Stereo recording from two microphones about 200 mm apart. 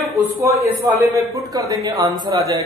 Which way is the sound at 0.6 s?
10° right (ahead or behind).